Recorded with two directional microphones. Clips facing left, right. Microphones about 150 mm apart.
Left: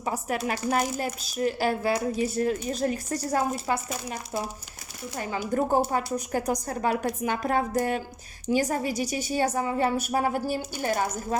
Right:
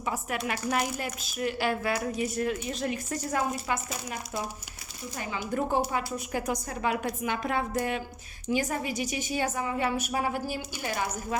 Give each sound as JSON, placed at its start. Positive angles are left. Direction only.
{"t": 0.0, "sound": "speech", "side_deg": 35}
{"t": 5.5, "sound": "speech", "side_deg": 45}